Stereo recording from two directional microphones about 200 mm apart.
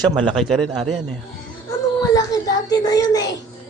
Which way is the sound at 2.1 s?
20° left (ahead or behind).